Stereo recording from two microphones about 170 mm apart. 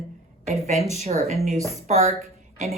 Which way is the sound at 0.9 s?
40° right (ahead or behind).